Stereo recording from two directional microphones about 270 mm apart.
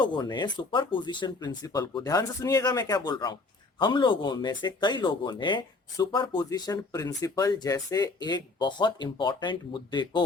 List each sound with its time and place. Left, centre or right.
0.0 s speech: centre